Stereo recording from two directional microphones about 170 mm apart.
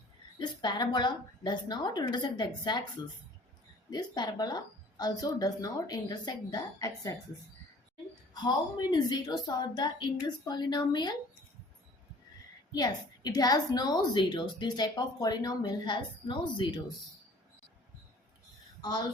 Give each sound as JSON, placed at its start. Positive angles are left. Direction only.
{"t": 0.3, "sound": "a woman's voice", "side_deg": 25}
{"t": 3.8, "sound": "a woman's voice", "side_deg": 25}
{"t": 8.3, "sound": "a woman's voice", "side_deg": 25}
{"t": 12.7, "sound": "a woman's voice", "side_deg": 25}
{"t": 18.8, "sound": "speech", "side_deg": 25}